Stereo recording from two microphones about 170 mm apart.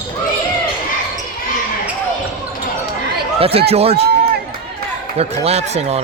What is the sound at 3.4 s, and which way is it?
Speech, 35° right (ahead or behind).